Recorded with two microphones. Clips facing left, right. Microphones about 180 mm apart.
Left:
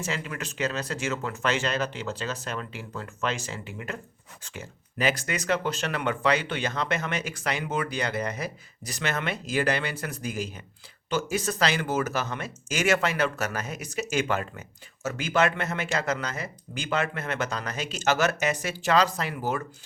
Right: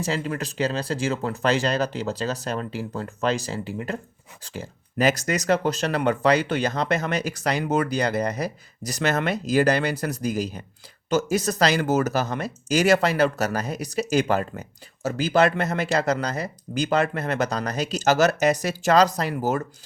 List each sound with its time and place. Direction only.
0.0 s speech: 35° right (ahead or behind)